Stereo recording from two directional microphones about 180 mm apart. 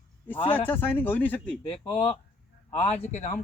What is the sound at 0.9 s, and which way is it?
Speech, 10° left (ahead or behind).